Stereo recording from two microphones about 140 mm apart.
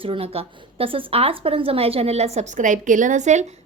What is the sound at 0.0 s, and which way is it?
A woman's voice, 40° right (ahead or behind).